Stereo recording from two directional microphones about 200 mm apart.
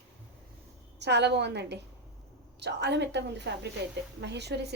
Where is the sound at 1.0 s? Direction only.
60° right (ahead or behind).